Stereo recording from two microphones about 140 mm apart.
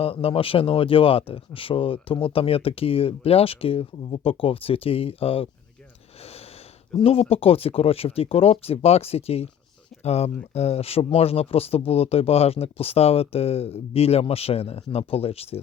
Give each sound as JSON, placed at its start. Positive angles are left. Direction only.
{"t": 0.0, "sound": "speech", "side_deg": 40}
{"t": 6.2, "sound": "a sound", "side_deg": 45}
{"t": 7.0, "sound": "speech", "side_deg": 45}